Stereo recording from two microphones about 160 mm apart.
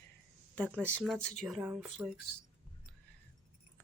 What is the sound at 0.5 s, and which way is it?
Speech, 10° left (ahead or behind).